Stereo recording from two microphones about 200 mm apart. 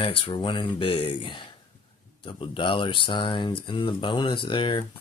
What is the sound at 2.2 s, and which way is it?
Speech, 25° left (ahead or behind).